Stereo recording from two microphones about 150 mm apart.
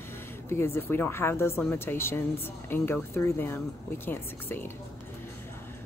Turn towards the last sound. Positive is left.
turn(degrees=15)  # may be behind; listen again after turning